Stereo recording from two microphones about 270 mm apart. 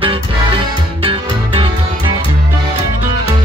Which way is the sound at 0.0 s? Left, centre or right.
Centre.